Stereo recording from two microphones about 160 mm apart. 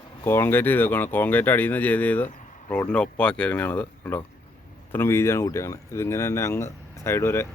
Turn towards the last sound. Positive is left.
turn(degrees=15)  # may be behind; listen again after turning